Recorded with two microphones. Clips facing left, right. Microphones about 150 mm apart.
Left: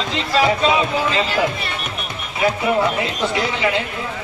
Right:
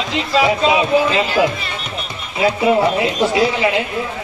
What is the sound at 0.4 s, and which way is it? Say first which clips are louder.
Speech: right 2 dB; 20° right (ahead or behind).